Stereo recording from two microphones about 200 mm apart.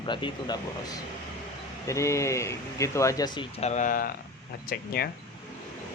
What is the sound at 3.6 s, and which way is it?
Speech, 35° left (ahead or behind).